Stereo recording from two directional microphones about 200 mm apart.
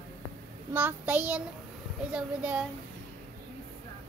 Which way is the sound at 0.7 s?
10° right (ahead or behind).